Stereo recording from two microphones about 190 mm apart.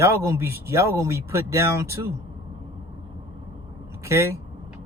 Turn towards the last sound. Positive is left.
turn(degrees=-15)  # may be behind; listen again after turning